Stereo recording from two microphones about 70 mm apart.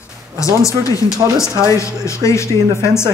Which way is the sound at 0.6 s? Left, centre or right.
Left.